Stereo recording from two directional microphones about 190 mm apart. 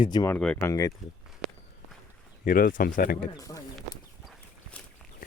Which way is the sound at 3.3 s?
15° left (ahead or behind).